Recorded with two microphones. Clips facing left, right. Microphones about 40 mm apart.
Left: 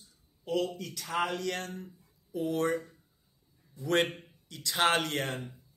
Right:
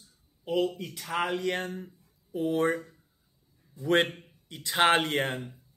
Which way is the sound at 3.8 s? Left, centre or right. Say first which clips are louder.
Right 3 dB; right.